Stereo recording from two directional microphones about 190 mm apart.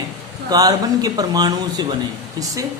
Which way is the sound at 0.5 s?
20° right (ahead or behind).